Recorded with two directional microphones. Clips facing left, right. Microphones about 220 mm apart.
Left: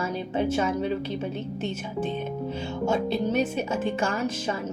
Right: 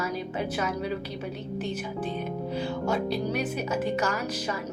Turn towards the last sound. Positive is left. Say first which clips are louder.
# left 2 dB
turn(degrees=30)  # may be behind; listen again after turning